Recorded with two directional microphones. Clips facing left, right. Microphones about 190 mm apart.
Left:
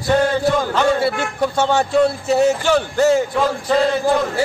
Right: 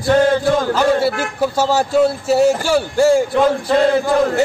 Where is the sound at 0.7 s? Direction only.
5° right (ahead or behind).